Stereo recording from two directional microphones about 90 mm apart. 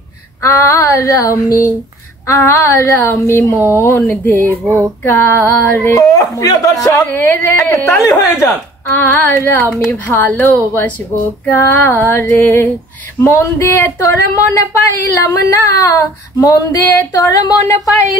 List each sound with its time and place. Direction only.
0.4 s speech: 35° left (ahead or behind)
3.5 s speech: 30° right (ahead or behind)
4.1 s a woman's voice: 20° left (ahead or behind)
5.0 s speech: 35° left (ahead or behind)
5.4 s a woman's voice: 20° left (ahead or behind)
5.9 s speech: 40° left (ahead or behind)
7.1 s a woman's voice: 25° left (ahead or behind)
11.5 s a woman's voice: 30° left (ahead or behind)